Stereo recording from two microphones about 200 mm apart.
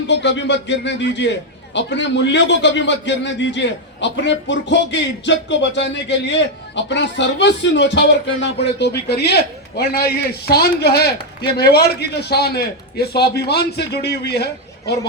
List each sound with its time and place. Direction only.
0.1 s a man's voice: 60° left (ahead or behind)